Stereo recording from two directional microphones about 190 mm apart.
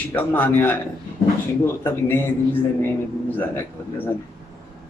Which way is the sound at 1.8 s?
10° left (ahead or behind).